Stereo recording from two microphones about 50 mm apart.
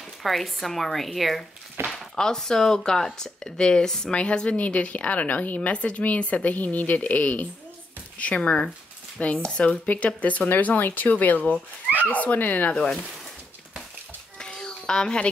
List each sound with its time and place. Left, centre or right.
0.2 s speech: centre
1.9 s speech: centre; by 7.4 s left
8.4 s speech: centre
11.5 s speech: right
12.1 s speech: left
14.4 s a sound: centre